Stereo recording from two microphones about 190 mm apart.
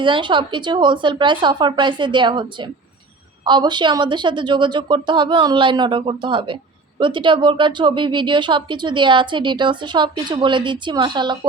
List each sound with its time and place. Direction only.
0.0 s speech: 25° right (ahead or behind)